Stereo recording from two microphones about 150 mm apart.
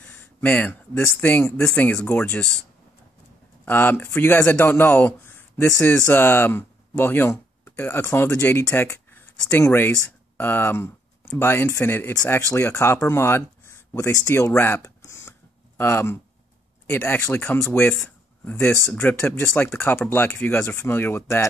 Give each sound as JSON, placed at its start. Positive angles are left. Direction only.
{"t": 0.0, "sound": "a man's voice", "side_deg": 10}
{"t": 3.6, "sound": "speech", "side_deg": 15}